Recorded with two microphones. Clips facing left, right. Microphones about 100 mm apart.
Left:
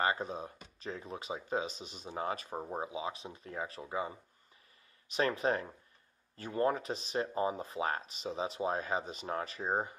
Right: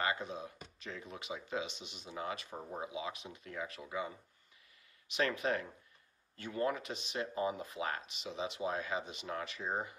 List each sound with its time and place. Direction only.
0.0 s speech: 35° left (ahead or behind)